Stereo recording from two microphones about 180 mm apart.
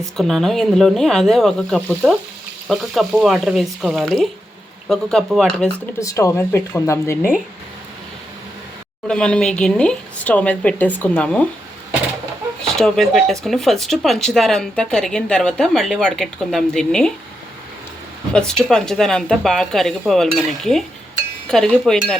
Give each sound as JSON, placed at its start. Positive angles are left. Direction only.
{"t": 0.2, "sound": "speech", "side_deg": 0}
{"t": 6.0, "sound": "speech", "side_deg": 15}
{"t": 9.0, "sound": "speech", "side_deg": 5}
{"t": 12.6, "sound": "speech", "side_deg": 0}
{"t": 18.3, "sound": "speech", "side_deg": 5}